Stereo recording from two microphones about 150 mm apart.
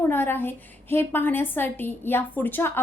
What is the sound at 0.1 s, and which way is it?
A woman's voice, 15° left (ahead or behind).